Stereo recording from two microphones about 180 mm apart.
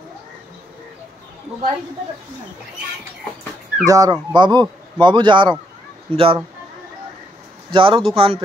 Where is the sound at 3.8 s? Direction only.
20° right (ahead or behind).